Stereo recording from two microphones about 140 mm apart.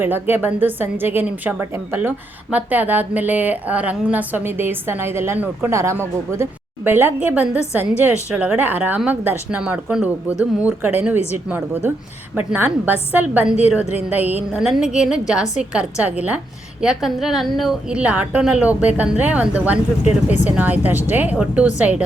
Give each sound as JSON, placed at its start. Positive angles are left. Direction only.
{"t": 0.0, "sound": "a woman's voice", "side_deg": -15}